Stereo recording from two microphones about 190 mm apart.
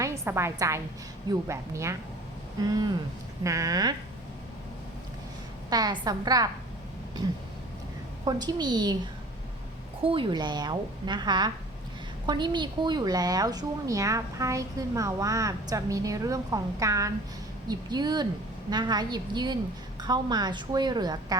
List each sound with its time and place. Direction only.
0.0 s a woman's voice: 15° right (ahead or behind)
5.7 s a woman's voice: 20° right (ahead or behind)
8.2 s a woman's voice: 20° right (ahead or behind)
10.0 s a woman's voice: 30° right (ahead or behind)